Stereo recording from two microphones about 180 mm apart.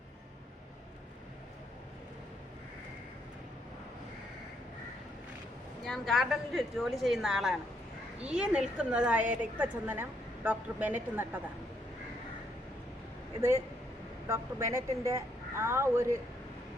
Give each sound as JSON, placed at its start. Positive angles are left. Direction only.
{"t": 5.8, "sound": "a woman's voice", "side_deg": 0}
{"t": 14.3, "sound": "a woman's voice", "side_deg": -15}